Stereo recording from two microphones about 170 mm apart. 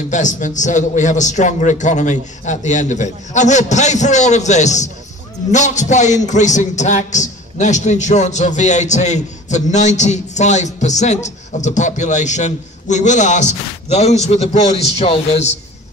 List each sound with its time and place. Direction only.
0.1 s a man's voice: 45° left (ahead or behind)